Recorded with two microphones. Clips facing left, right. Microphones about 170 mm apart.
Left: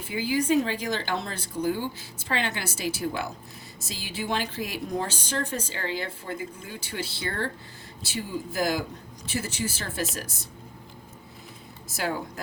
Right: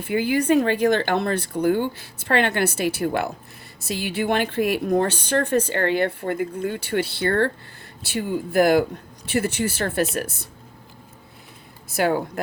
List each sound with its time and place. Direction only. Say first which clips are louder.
0.0 s a woman's voice: right 6 dB; 60° right (ahead or behind)
11.9 s a woman's voice: right 9 dB; 60° right (ahead or behind)